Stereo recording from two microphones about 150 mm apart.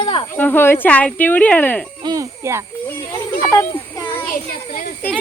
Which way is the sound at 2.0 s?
20° right (ahead or behind).